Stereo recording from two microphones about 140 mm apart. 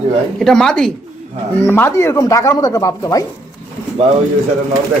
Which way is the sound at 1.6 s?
15° left (ahead or behind).